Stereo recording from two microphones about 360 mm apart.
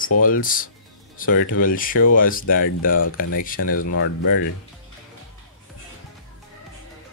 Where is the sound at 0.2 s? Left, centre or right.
Left.